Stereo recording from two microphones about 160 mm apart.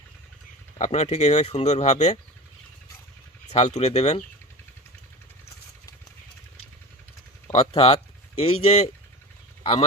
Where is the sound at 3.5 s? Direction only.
40° left (ahead or behind).